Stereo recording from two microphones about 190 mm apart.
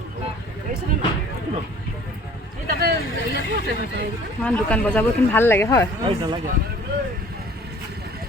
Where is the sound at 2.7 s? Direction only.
55° right (ahead or behind).